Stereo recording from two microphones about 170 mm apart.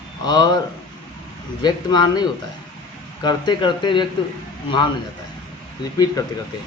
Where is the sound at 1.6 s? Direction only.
25° left (ahead or behind).